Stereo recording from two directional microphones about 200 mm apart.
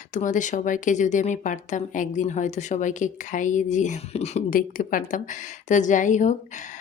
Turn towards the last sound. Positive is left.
turn(degrees=40)  # may be behind; listen again after turning